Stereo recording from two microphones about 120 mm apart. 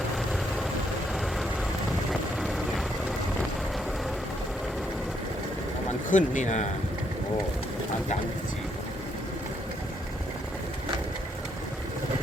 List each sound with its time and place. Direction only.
2.4 s vehicle: centre (ahead or behind)
6.1 s speech: 90° left